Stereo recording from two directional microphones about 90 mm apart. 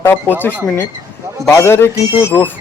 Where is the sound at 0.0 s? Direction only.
25° left (ahead or behind).